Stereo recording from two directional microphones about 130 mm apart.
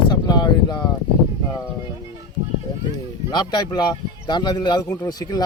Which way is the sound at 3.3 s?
35° left (ahead or behind).